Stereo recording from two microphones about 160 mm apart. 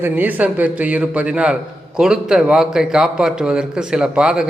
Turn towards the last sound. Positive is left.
turn(degrees=-5)  # may be behind; listen again after turning